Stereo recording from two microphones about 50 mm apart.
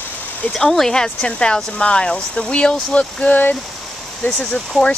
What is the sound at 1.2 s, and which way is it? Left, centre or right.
Speech, centre.